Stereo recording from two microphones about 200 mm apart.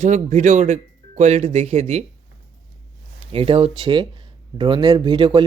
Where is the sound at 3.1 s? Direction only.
30° right (ahead or behind).